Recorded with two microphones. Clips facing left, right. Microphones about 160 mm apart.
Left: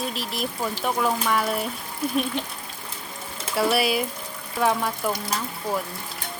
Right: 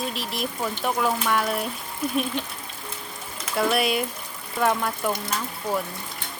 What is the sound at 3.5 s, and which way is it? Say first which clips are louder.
Speech: left 1 dB; 5° left (ahead or behind).